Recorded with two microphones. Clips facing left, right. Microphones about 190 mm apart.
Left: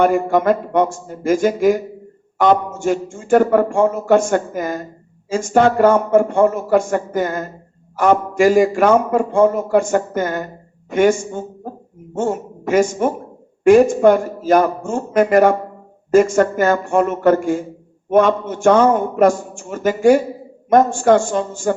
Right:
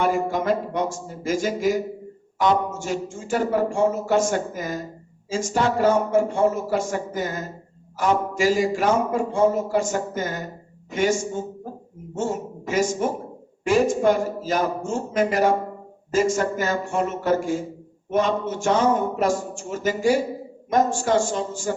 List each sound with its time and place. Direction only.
0.0 s a man's voice: 55° left (ahead or behind)